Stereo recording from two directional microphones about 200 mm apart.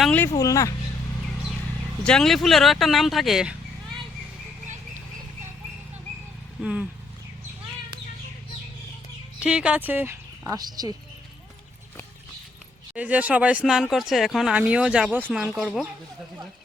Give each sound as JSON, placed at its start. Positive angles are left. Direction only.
{"t": 0.0, "sound": "speech", "side_deg": 5}
{"t": 2.0, "sound": "speech", "side_deg": 0}
{"t": 6.6, "sound": "speech", "side_deg": -5}
{"t": 9.4, "sound": "a woman's voice", "side_deg": -5}
{"t": 12.9, "sound": "speech", "side_deg": -5}